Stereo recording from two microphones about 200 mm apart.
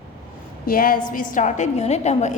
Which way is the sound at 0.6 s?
45° left (ahead or behind).